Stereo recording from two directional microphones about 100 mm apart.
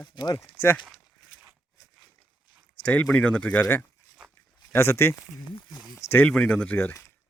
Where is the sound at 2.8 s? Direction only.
10° left (ahead or behind).